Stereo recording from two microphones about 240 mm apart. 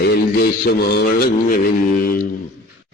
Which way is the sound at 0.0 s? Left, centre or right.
Left.